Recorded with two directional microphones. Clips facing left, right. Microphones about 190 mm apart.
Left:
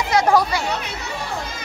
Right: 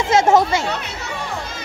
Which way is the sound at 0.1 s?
25° right (ahead or behind).